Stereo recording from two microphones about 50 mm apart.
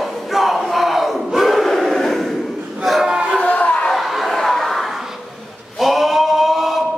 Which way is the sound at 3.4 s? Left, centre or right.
Left.